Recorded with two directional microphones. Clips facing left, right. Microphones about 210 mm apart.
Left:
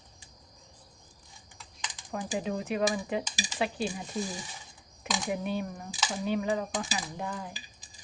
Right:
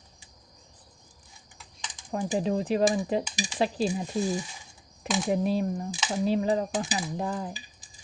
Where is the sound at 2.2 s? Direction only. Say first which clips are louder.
Right 6 dB; 35° right (ahead or behind).